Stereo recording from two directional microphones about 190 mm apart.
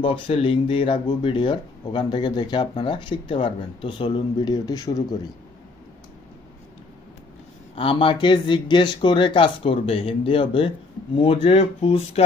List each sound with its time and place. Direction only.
0.0 s speech: 25° left (ahead or behind)
7.7 s speech: 30° left (ahead or behind)